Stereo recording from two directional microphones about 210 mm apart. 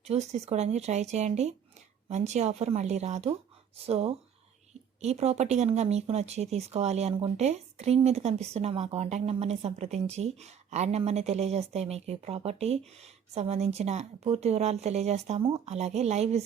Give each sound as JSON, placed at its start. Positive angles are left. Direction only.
{"t": 0.0, "sound": "speech", "side_deg": -30}